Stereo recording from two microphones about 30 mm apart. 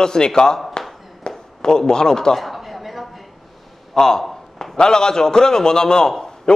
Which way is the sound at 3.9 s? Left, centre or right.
Centre.